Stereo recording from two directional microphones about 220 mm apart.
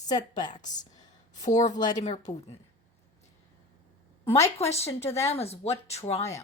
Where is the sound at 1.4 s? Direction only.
35° left (ahead or behind).